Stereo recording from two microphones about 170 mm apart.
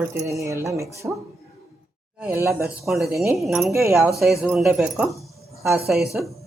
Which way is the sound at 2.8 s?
Centre (ahead or behind).